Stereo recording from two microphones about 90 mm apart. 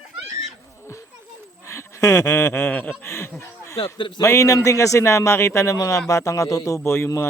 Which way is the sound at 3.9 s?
65° left (ahead or behind).